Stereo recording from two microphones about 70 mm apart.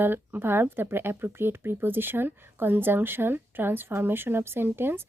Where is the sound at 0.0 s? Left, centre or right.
Right.